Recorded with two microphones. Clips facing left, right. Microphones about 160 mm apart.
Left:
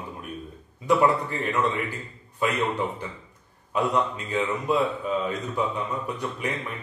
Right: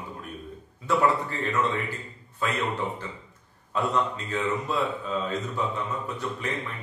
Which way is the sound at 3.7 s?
15° left (ahead or behind).